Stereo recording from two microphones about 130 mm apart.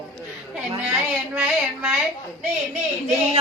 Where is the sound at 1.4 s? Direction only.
10° right (ahead or behind).